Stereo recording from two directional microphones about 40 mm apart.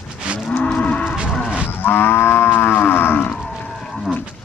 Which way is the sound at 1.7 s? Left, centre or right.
Left.